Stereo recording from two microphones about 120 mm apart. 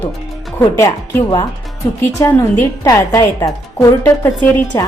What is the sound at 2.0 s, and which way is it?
A woman's voice, 25° left (ahead or behind).